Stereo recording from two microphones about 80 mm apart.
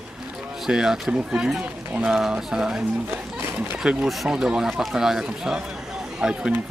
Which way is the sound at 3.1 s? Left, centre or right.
Right.